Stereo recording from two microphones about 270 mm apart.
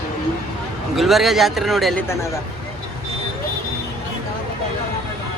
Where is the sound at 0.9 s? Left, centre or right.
Centre.